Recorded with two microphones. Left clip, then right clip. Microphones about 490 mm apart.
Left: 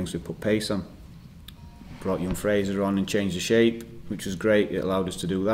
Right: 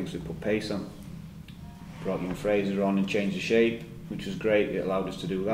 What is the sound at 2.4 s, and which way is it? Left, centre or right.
Speech, left.